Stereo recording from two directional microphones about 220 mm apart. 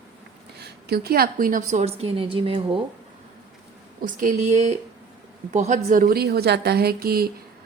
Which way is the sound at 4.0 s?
40° right (ahead or behind).